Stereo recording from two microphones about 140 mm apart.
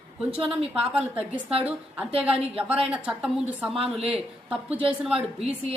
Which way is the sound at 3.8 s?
45° right (ahead or behind).